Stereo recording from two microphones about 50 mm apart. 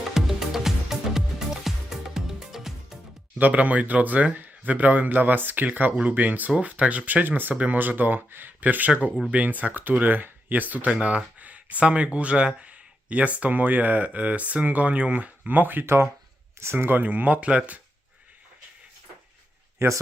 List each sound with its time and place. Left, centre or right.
0.1 s music: centre
3.3 s speech: right
17.0 s speech: right